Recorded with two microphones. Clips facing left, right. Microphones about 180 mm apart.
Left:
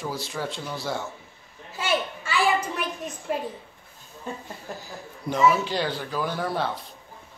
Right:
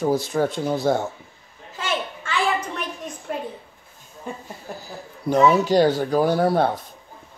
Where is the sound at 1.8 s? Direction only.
10° left (ahead or behind).